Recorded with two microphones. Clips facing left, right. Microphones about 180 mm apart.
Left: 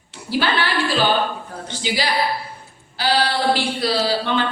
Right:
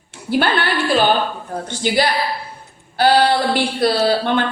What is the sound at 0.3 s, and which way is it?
Speech, 55° right (ahead or behind).